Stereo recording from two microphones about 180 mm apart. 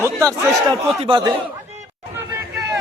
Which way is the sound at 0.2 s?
20° right (ahead or behind).